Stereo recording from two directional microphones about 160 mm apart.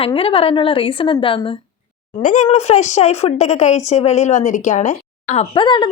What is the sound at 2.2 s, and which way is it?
A woman's voice, 50° left (ahead or behind).